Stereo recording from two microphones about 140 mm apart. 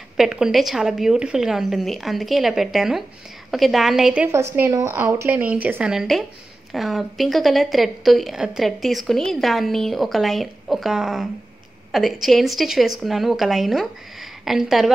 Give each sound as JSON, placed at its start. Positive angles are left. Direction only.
{"t": 0.2, "sound": "a woman's voice", "side_deg": -5}
{"t": 4.3, "sound": "a woman's voice", "side_deg": -20}